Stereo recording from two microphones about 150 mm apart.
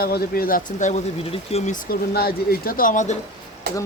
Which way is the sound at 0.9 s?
45° left (ahead or behind).